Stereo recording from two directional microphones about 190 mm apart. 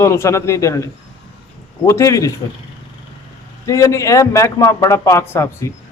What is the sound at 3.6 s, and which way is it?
A man's voice, 15° left (ahead or behind).